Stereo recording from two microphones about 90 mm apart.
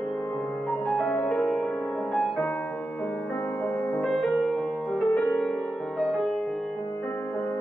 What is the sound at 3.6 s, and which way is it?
Music, 20° left (ahead or behind).